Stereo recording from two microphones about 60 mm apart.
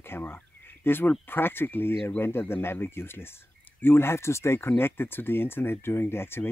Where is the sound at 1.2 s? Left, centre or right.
Left.